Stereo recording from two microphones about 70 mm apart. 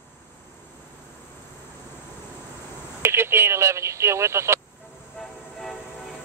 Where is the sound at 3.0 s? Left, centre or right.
Right.